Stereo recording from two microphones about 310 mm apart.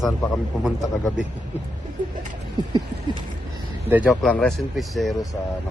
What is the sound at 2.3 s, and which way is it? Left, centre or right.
Rodents, centre.